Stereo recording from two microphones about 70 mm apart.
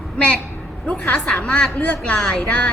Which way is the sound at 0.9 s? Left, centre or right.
Centre.